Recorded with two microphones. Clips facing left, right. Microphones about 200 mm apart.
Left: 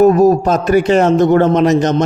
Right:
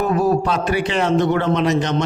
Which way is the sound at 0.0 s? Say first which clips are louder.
Left 9 dB; 40° left (ahead or behind).